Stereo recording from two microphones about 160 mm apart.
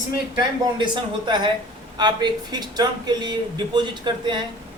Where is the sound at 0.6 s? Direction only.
30° right (ahead or behind).